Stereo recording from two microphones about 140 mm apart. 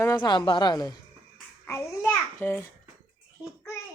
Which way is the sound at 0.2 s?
35° left (ahead or behind).